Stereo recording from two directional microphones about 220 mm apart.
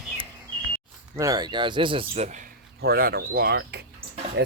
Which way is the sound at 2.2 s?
35° right (ahead or behind).